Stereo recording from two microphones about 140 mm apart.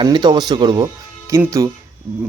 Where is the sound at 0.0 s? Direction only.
30° right (ahead or behind).